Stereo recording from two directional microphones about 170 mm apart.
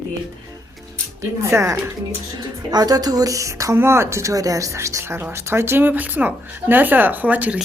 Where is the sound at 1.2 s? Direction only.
15° right (ahead or behind).